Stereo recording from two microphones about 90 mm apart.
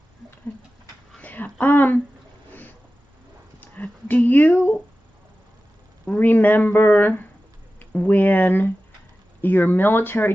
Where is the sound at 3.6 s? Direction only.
20° left (ahead or behind).